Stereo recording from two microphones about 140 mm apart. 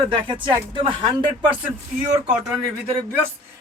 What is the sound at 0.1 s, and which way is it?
Speech, 35° right (ahead or behind).